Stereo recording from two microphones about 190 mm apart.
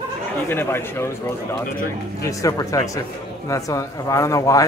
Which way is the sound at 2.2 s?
15° left (ahead or behind).